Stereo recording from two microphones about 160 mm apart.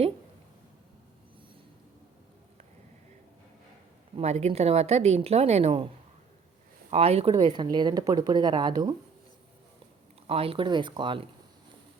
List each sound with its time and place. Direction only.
4.1 s a woman's voice: 40° right (ahead or behind)
6.9 s a woman's voice: 40° right (ahead or behind)
7.4 s speech: 25° right (ahead or behind)
10.2 s a woman's voice: 35° right (ahead or behind)